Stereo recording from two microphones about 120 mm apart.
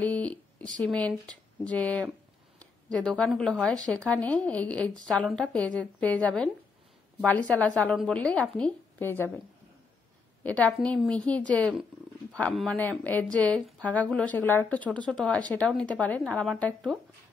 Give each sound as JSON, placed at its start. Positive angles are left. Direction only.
{"t": 0.0, "sound": "a sound", "side_deg": 10}
{"t": 0.8, "sound": "a woman's voice", "side_deg": 10}
{"t": 10.4, "sound": "a woman's voice", "side_deg": 10}